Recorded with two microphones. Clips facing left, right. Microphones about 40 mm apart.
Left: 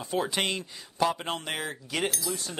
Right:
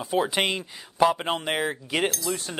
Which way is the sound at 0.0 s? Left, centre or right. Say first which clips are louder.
Right 4 dB; centre.